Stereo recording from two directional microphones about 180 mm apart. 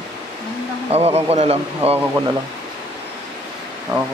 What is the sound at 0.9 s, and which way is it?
Speech, 35° right (ahead or behind).